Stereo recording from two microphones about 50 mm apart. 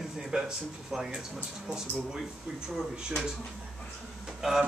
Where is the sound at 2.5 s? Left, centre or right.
Right.